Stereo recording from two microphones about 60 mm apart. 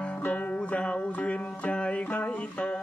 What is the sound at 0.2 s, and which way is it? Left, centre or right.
Music, left.